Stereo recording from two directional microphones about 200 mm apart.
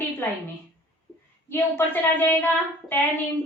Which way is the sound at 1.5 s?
10° left (ahead or behind).